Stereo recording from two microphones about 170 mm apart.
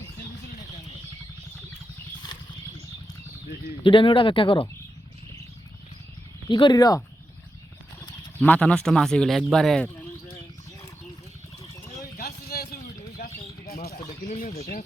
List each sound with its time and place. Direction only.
3.8 s speech: 30° left (ahead or behind)
6.5 s speech: 25° left (ahead or behind)
8.4 s speech: 10° left (ahead or behind)
12.1 s a sound: 65° left (ahead or behind)
13.1 s bird: 60° left (ahead or behind)
14.3 s speech: 45° left (ahead or behind)